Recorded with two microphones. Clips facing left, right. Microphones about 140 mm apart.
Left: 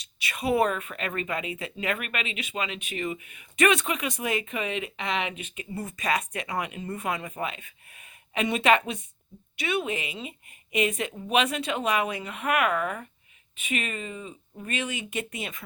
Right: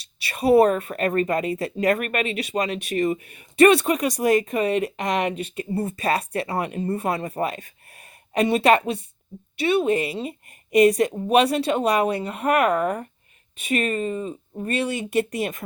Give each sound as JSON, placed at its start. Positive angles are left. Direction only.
{"t": 0.2, "sound": "speech", "side_deg": -35}